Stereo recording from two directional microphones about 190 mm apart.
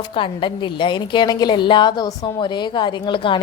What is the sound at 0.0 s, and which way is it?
A woman's voice, 25° left (ahead or behind).